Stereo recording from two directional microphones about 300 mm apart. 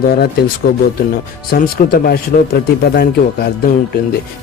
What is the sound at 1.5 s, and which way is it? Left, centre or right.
A man's voice, left.